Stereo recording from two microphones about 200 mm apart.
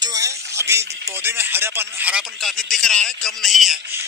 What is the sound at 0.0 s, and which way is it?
Speech, 15° right (ahead or behind).